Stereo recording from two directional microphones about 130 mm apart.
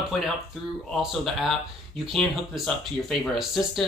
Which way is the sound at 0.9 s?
Centre (ahead or behind).